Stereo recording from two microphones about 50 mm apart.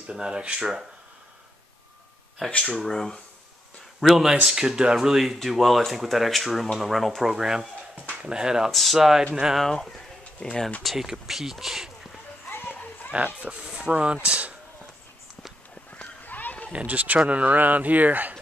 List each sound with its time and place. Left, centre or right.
0.0 s speech: centre
2.7 s speech: centre
4.0 s speech: centre
7.2 s speech: centre
8.7 s speech: centre
9.6 s speech: centre
10.8 s speech: centre
12.4 s music: left
13.1 s speech: right
15.9 s a sound: left
16.7 s speech: right